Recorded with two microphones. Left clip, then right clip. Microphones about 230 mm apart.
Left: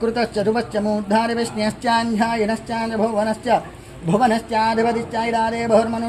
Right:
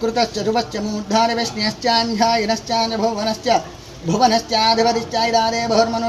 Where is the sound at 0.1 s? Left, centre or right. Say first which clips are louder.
Right 1 dB; left.